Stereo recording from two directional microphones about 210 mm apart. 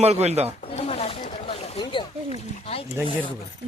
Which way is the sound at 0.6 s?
30° left (ahead or behind).